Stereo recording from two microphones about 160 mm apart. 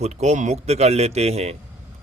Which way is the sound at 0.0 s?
45° right (ahead or behind).